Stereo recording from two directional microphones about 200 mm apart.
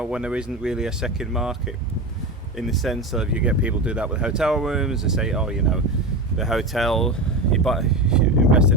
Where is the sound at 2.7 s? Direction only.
Centre (ahead or behind).